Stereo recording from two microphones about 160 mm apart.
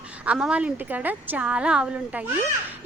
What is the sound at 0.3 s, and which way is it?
A woman's voice, 5° right (ahead or behind).